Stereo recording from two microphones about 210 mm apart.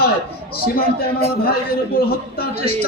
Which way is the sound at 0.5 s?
45° left (ahead or behind).